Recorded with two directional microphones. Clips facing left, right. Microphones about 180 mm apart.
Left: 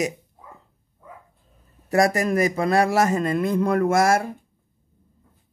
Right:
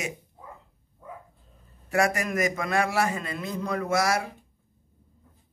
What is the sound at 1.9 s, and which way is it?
A man's voice, 35° left (ahead or behind).